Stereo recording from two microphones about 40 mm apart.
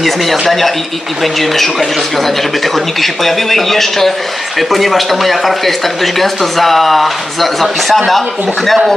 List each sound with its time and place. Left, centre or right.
0.0 s speech: centre